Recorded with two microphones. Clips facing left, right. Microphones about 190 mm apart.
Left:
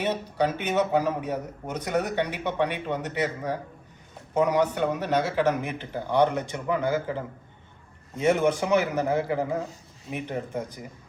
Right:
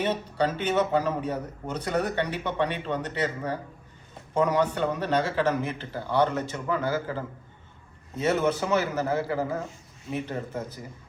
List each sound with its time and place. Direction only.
0.0 s speech: 10° left (ahead or behind)